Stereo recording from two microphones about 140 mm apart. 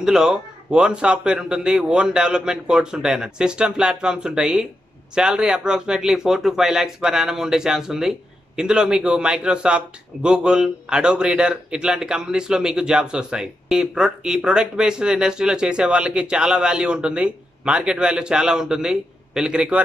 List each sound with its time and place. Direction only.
0.0 s a man's voice: 5° right (ahead or behind)